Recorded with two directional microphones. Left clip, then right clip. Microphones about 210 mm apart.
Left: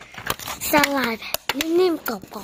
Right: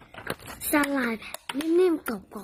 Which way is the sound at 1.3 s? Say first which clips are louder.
Left 8 dB; 40° left (ahead or behind).